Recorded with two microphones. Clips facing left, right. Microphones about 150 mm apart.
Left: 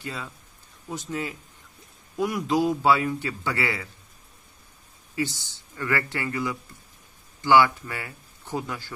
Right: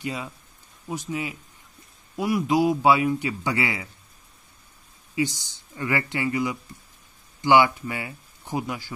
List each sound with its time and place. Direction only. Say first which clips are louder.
0.0 s a man's voice: right 4 dB; 15° right (ahead or behind)
5.1 s a man's voice: right 3 dB; 15° right (ahead or behind)